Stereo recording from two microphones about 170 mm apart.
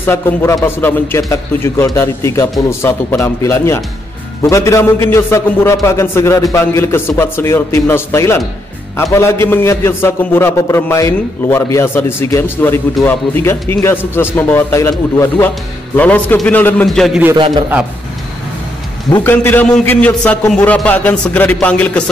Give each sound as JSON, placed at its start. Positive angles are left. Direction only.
{"t": 0.0, "sound": "a man's voice", "side_deg": 15}
{"t": 19.2, "sound": "a man's voice", "side_deg": 10}